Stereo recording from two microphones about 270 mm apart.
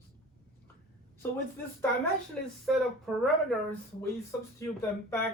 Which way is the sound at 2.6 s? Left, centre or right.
Centre.